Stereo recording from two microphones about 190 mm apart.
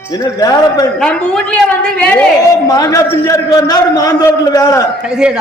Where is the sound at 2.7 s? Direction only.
20° left (ahead or behind).